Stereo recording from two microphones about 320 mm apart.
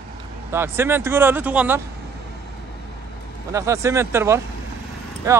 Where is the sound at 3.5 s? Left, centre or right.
Centre.